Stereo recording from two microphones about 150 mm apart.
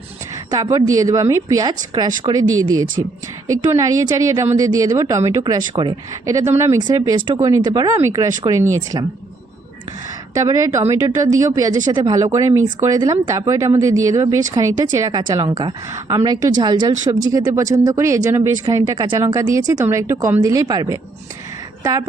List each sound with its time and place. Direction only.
0.5 s speech: 25° right (ahead or behind)
10.3 s a woman's voice: 25° right (ahead or behind)